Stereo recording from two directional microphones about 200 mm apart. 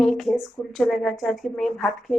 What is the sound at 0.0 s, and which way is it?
Speech, centre (ahead or behind).